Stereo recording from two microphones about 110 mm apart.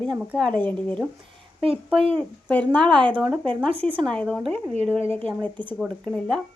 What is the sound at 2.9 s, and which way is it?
A woman's voice, 50° right (ahead or behind).